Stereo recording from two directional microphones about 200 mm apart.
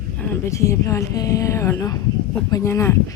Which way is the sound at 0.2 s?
10° left (ahead or behind).